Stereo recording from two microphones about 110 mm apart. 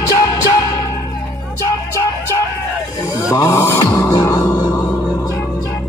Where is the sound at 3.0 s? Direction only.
30° left (ahead or behind).